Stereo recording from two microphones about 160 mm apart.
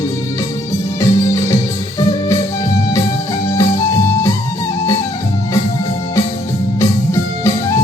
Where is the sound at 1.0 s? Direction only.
20° left (ahead or behind).